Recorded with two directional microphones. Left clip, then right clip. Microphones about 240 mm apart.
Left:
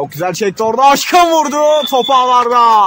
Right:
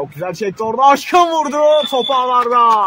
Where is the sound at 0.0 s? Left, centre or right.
Left.